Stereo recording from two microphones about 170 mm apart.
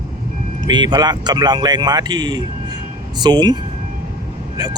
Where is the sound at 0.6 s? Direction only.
25° right (ahead or behind).